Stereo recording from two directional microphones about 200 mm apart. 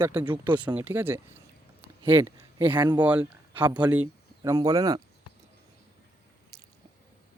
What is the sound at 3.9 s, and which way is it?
Speech, 10° right (ahead or behind).